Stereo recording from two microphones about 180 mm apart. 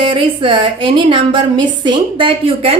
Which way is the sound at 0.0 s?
30° right (ahead or behind).